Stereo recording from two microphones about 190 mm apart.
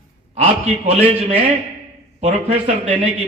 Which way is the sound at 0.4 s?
35° right (ahead or behind).